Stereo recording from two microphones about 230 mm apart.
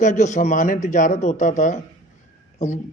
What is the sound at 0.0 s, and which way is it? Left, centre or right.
A man's voice, left.